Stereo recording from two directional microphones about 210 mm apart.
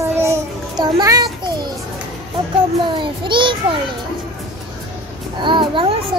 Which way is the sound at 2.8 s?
25° right (ahead or behind).